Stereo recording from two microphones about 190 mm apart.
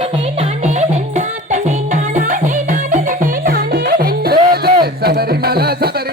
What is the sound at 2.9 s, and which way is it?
Music, 45° right (ahead or behind).